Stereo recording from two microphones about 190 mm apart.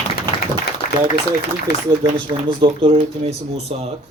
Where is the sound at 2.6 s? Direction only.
30° right (ahead or behind).